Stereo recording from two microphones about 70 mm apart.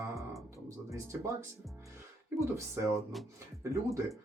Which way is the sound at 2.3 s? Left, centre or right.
Right.